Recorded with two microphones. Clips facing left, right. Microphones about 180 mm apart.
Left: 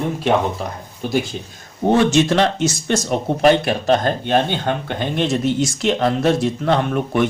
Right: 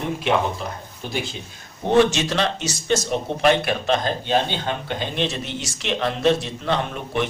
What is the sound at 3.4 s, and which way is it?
Speech, 30° left (ahead or behind).